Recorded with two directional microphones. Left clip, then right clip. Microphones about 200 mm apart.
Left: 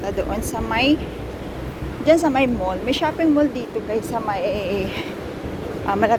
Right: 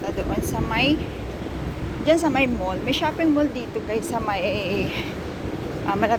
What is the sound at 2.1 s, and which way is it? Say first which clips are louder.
Speech: left 3 dB; 15° left (ahead or behind).